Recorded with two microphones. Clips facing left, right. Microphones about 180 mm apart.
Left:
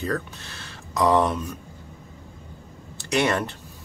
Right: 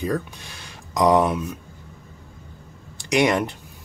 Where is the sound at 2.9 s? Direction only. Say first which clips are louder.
Right 3 dB; 15° right (ahead or behind).